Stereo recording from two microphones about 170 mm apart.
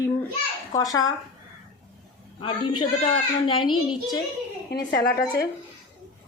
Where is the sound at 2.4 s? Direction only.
30° left (ahead or behind).